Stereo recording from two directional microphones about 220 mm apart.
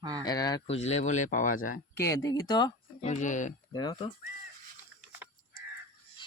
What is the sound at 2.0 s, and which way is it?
Speech, 15° left (ahead or behind).